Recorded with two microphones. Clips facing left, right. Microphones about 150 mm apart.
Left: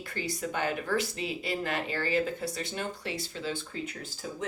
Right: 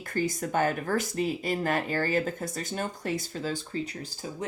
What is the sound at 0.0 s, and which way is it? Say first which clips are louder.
Speech: right 5 dB; 45° right (ahead or behind).